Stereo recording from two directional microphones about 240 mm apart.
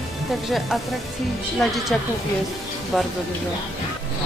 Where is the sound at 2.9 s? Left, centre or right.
Centre.